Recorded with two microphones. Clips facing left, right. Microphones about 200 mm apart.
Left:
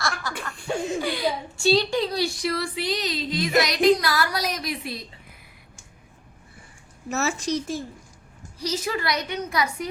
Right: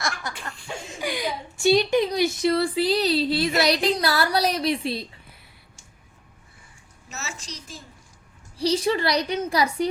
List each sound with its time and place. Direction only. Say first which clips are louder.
0.0 s a sound: left 1 dB; 20° right (ahead or behind)
1.0 s a woman's voice: left 2 dB; 15° right (ahead or behind)
7.1 s a child's voice: left 13 dB; 60° left (ahead or behind)
8.5 s a woman's voice: right 6 dB; 30° right (ahead or behind)